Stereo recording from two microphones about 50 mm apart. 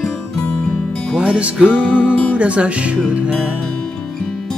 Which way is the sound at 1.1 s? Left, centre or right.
Right.